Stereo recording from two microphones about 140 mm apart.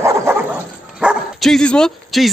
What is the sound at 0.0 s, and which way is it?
Dog, 15° right (ahead or behind).